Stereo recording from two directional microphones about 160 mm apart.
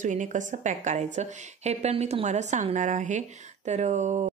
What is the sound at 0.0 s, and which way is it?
A woman's voice, 55° right (ahead or behind).